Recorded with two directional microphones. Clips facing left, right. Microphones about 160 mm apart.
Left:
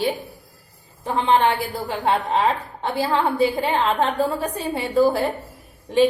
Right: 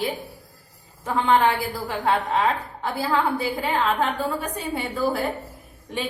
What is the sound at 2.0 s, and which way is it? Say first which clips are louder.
A woman's voice: left 2 dB; 25° left (ahead or behind).